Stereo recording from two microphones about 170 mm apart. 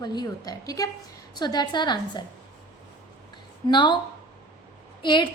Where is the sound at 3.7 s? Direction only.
25° left (ahead or behind).